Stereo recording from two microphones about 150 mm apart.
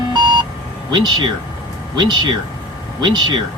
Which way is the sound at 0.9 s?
30° right (ahead or behind).